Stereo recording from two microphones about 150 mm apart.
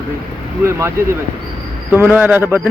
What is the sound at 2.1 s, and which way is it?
Speech, 5° right (ahead or behind).